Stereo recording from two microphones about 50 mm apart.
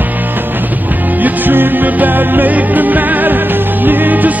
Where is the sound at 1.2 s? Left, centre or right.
Right.